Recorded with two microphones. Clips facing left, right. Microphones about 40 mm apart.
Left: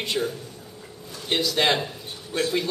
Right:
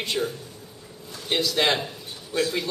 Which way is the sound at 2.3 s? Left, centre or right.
Left.